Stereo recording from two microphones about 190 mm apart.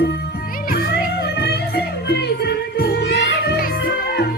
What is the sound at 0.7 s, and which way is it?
Music, 55° left (ahead or behind).